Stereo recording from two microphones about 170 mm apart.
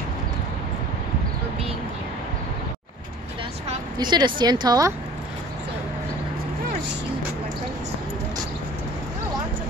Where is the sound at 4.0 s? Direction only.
25° right (ahead or behind).